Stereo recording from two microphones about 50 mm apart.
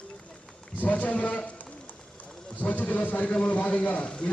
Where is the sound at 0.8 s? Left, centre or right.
Left.